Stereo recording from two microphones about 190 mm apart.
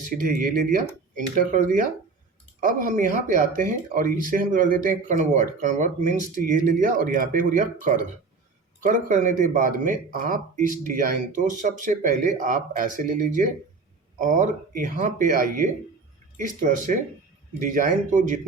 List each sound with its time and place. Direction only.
0.1 s speech: 45° right (ahead or behind)